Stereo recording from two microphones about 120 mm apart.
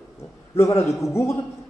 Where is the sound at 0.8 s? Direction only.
25° left (ahead or behind).